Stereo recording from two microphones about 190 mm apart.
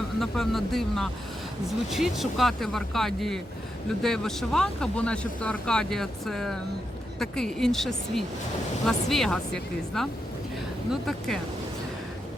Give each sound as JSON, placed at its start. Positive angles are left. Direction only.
{"t": 0.2, "sound": "speech", "side_deg": 0}